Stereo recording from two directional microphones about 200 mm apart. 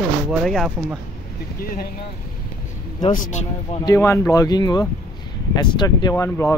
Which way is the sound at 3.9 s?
15° left (ahead or behind).